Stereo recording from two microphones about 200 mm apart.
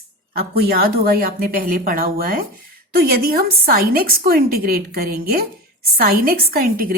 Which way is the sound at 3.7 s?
50° right (ahead or behind).